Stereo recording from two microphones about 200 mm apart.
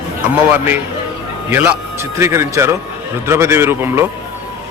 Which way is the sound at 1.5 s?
10° right (ahead or behind).